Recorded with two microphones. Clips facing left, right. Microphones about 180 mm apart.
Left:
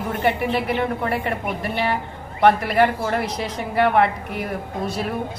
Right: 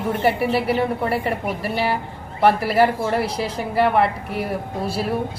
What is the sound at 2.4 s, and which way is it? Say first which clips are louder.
A woman's voice: even; 5° right (ahead or behind).